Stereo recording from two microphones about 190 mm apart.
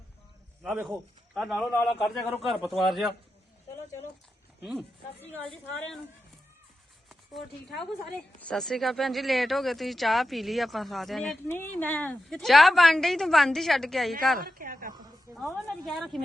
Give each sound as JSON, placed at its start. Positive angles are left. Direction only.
{"t": 0.6, "sound": "speech", "side_deg": -5}
{"t": 4.6, "sound": "speech", "side_deg": 0}
{"t": 7.1, "sound": "speech", "side_deg": 0}
{"t": 14.3, "sound": "a woman's voice", "side_deg": -50}
{"t": 15.3, "sound": "a woman's voice", "side_deg": -15}
{"t": 15.8, "sound": "speech", "side_deg": 0}